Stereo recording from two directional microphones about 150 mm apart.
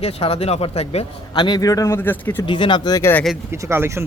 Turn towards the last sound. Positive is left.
turn(degrees=-15)  # may be behind; listen again after turning